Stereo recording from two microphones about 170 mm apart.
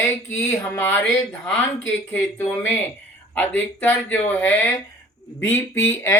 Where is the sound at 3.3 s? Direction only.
10° left (ahead or behind).